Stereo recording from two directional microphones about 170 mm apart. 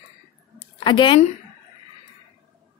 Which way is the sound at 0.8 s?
30° left (ahead or behind).